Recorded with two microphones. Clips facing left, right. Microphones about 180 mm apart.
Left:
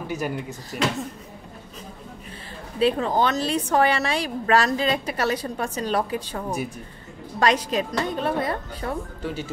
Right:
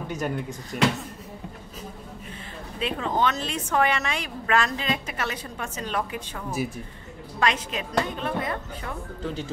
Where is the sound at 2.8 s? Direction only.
35° left (ahead or behind).